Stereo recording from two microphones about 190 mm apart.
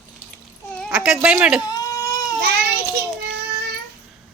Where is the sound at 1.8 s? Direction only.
15° left (ahead or behind).